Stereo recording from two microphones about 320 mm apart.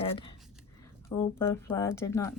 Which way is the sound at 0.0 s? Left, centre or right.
Centre.